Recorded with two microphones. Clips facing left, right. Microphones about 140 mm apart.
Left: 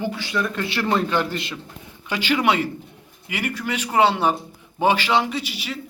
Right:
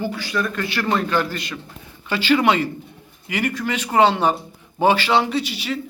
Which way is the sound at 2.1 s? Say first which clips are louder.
Right 3 dB; 15° left (ahead or behind).